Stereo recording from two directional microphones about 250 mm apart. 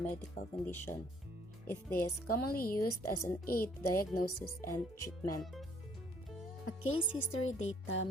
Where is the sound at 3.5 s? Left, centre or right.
Left.